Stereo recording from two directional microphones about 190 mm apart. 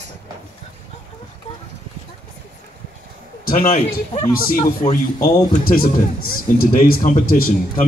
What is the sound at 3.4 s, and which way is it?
A man's voice, 50° left (ahead or behind).